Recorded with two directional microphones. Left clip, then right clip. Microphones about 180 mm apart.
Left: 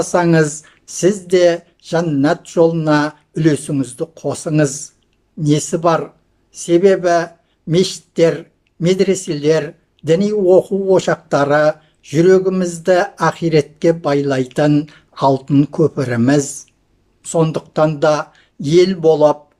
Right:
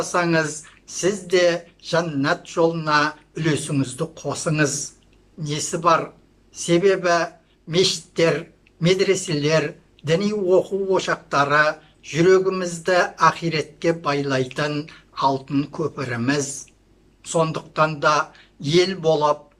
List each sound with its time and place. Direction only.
0.0 s speech: 40° left (ahead or behind)